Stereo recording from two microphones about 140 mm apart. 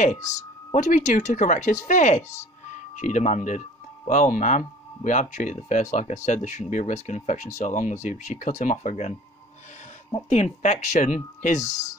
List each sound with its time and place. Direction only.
0.2 s a sound: 25° left (ahead or behind)
0.7 s speech: 60° left (ahead or behind)
10.1 s speech: 50° left (ahead or behind)